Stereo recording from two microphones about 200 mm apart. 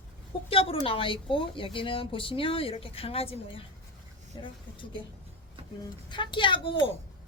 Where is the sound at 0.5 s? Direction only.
30° left (ahead or behind).